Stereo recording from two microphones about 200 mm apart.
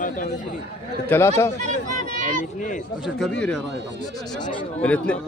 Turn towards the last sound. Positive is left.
turn(degrees=5)  # may be behind; listen again after turning